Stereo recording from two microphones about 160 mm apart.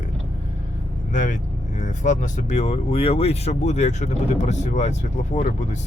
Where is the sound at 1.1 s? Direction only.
50° left (ahead or behind).